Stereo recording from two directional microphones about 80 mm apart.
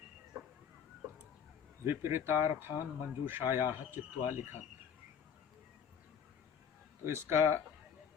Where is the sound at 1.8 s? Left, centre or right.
Right.